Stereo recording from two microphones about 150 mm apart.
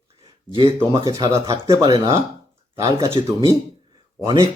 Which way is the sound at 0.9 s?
25° right (ahead or behind).